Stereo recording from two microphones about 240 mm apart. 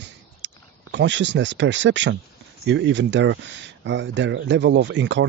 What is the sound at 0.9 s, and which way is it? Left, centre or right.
Speech, right.